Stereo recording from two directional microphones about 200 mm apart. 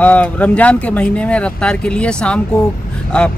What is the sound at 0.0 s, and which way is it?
Speech, 5° left (ahead or behind).